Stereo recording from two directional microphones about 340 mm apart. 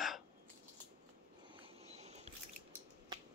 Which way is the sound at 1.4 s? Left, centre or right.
Centre.